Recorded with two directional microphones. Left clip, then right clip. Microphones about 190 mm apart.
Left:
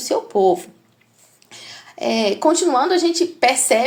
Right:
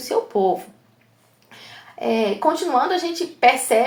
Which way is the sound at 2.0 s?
40° left (ahead or behind).